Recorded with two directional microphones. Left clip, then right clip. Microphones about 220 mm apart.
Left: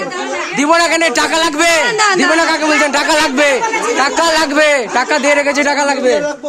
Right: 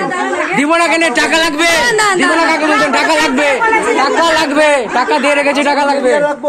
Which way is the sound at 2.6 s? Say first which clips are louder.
Right 1 dB; 35° left (ahead or behind).